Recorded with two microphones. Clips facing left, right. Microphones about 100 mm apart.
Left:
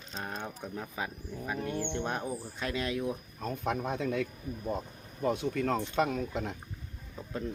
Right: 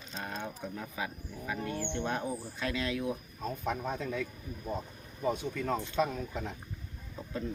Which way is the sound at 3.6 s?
70° left (ahead or behind).